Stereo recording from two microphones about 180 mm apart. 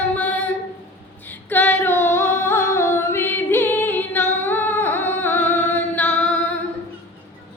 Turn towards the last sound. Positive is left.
turn(degrees=10)  # may be behind; listen again after turning